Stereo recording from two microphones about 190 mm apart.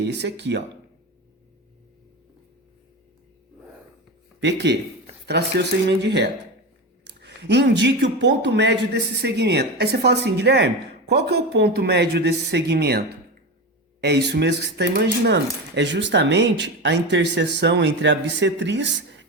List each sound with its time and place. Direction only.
0.0 s speech: 65° right (ahead or behind)
4.4 s speech: 65° right (ahead or behind)
14.0 s speech: 60° right (ahead or behind)